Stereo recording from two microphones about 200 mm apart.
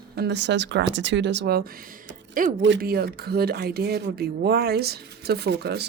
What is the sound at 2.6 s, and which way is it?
Speech, 55° right (ahead or behind).